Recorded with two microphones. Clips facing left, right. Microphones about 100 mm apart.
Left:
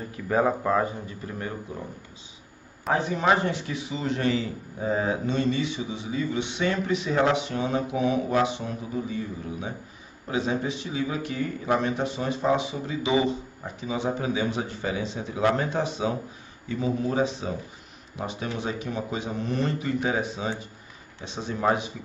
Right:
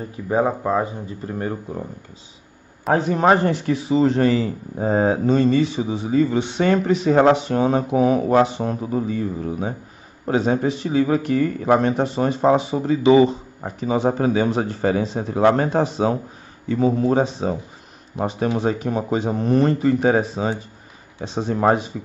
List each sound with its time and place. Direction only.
0.3 s speech: 15° right (ahead or behind)
1.0 s a man's voice: 35° right (ahead or behind)
2.9 s a man's voice: 50° right (ahead or behind)